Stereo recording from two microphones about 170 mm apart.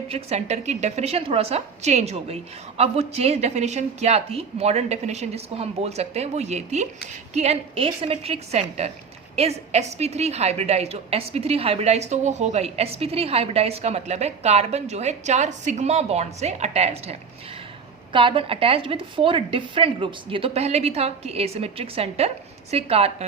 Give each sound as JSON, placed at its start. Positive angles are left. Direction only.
{"t": 0.1, "sound": "a woman's voice", "side_deg": -40}